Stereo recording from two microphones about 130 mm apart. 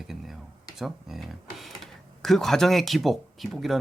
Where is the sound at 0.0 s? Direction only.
Centre (ahead or behind).